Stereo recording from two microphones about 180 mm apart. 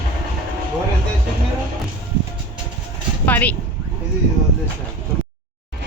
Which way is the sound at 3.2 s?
10° left (ahead or behind).